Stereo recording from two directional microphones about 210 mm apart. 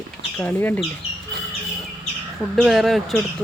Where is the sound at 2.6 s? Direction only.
Centre (ahead or behind).